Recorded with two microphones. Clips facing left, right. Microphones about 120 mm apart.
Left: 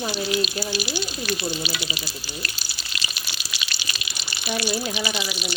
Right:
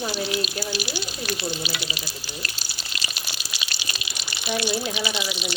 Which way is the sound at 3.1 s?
35° right (ahead or behind).